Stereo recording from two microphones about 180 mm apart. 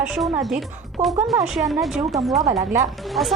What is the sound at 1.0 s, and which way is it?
Speech, 40° right (ahead or behind).